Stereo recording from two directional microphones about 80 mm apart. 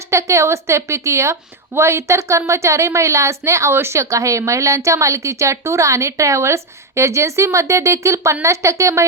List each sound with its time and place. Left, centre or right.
0.1 s a woman's voice: right